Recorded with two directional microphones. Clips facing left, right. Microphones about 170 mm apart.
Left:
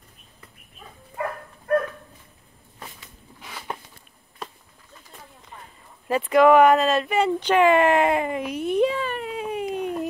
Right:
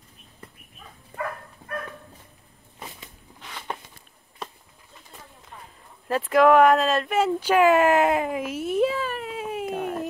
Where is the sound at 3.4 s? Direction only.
5° left (ahead or behind).